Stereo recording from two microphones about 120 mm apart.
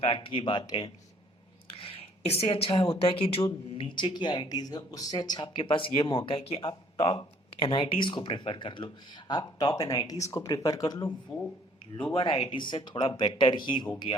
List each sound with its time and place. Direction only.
0.0 s speech: 50° left (ahead or behind)
1.6 s a sound: 50° left (ahead or behind)
3.0 s speech: 50° left (ahead or behind); by 11.1 s 30° left (ahead or behind)
11.9 s speech: 45° left (ahead or behind)